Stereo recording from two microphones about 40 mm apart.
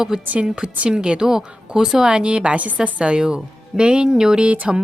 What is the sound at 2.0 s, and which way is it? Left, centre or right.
A woman's voice, right.